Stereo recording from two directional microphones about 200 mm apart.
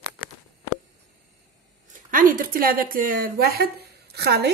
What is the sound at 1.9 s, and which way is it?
A woman's voice, 45° right (ahead or behind).